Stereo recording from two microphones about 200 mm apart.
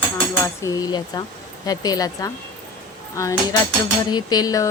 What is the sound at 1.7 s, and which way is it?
Speech, 20° left (ahead or behind).